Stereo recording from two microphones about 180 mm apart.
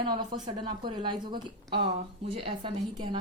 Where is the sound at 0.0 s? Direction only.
25° right (ahead or behind).